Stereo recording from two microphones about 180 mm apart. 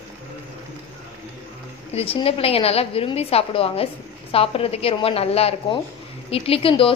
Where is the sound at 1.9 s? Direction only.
35° left (ahead or behind).